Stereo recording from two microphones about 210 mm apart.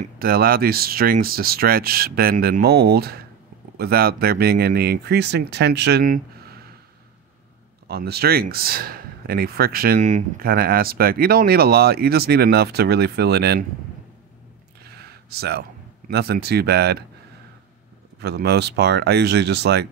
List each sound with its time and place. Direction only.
0.0 s speech: 45° right (ahead or behind)
7.9 s speech: 50° right (ahead or behind)
14.8 s a sound: 50° right (ahead or behind)
16.1 s speech: 50° right (ahead or behind)
18.2 s speech: 50° right (ahead or behind)